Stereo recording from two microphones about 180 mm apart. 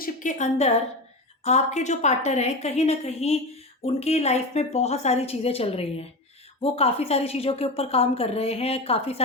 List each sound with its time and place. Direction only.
0.0 s a woman's voice: 45° left (ahead or behind)